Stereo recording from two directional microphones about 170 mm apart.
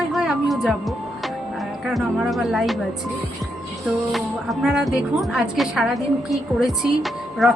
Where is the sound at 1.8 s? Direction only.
Centre (ahead or behind).